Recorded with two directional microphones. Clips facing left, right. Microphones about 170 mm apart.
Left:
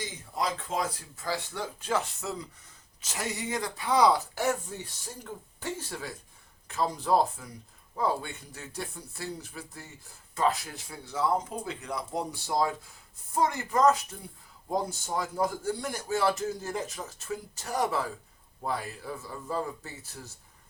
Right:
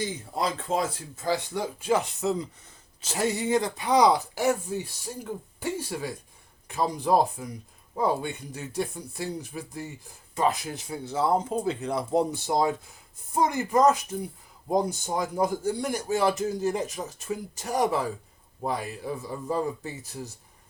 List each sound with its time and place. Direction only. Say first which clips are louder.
0.0 s a man's voice: right 4 dB; 30° right (ahead or behind)